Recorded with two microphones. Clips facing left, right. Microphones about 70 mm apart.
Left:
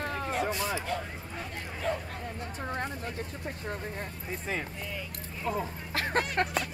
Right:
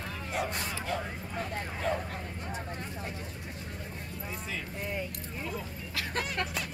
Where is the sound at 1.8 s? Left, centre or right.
Centre.